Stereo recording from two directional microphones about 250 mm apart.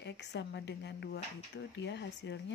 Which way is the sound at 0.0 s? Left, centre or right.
Left.